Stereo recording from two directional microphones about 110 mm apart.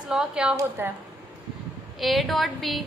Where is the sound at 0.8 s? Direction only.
20° right (ahead or behind).